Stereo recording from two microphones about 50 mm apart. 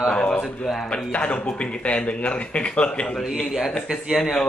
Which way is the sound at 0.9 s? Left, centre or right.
Left.